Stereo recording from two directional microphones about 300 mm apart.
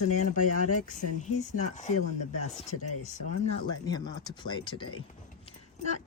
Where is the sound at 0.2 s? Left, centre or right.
Left.